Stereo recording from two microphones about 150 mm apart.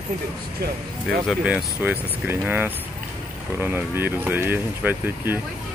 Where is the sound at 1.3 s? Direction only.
5° right (ahead or behind).